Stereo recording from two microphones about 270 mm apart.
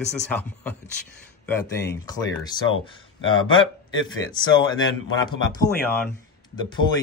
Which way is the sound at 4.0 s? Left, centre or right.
Centre.